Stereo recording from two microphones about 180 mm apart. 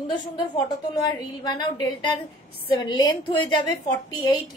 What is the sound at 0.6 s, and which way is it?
A woman's voice, 20° left (ahead or behind).